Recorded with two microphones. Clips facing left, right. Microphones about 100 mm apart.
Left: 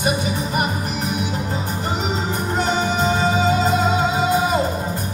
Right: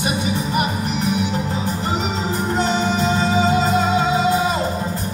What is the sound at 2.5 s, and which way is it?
Music, 50° left (ahead or behind).